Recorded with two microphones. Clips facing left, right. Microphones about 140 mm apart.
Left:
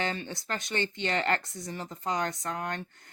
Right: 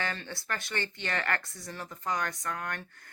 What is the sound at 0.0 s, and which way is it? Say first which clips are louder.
Speech: left 3 dB; 20° left (ahead or behind).